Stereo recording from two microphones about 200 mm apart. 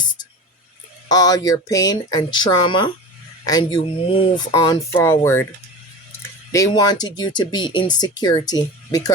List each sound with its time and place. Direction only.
1.0 s speech: 20° left (ahead or behind)